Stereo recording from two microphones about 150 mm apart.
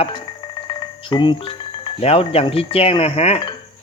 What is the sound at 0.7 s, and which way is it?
Music, 30° left (ahead or behind).